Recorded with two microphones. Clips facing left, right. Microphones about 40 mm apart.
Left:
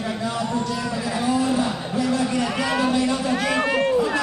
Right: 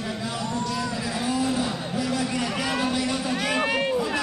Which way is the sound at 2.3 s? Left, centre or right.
Centre.